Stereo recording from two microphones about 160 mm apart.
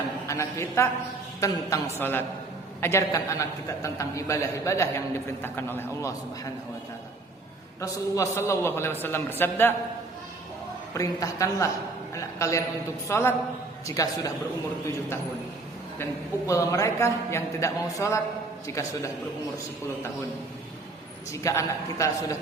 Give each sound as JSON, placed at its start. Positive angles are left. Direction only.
{"t": 0.3, "sound": "a man's voice", "side_deg": 20}
{"t": 7.8, "sound": "a man's voice", "side_deg": 20}
{"t": 10.9, "sound": "a man's voice", "side_deg": 20}
{"t": 16.5, "sound": "a man's voice", "side_deg": 20}
{"t": 21.3, "sound": "a man's voice", "side_deg": 20}